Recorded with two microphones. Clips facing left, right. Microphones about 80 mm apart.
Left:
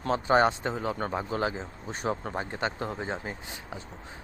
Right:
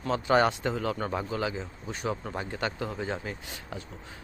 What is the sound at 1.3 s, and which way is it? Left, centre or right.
Speech, left.